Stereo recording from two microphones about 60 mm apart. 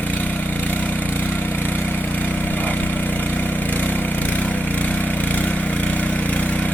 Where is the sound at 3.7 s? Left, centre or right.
Left.